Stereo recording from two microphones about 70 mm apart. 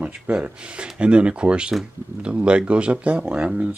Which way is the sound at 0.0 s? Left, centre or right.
Centre.